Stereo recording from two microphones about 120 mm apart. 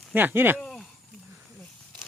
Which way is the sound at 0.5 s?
5° left (ahead or behind).